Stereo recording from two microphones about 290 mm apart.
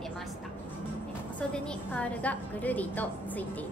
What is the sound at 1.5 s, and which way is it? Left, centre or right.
A woman's voice, centre.